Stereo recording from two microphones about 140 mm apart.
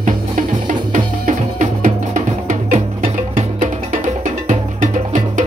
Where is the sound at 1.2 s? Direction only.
70° right (ahead or behind).